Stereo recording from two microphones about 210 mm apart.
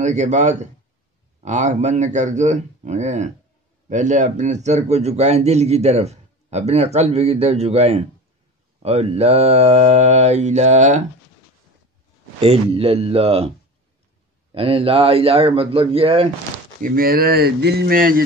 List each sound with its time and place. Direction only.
0.0 s a man's voice: 35° right (ahead or behind)
12.4 s a man's voice: 30° right (ahead or behind)
14.5 s a man's voice: 25° right (ahead or behind)
16.8 s speech: 45° right (ahead or behind)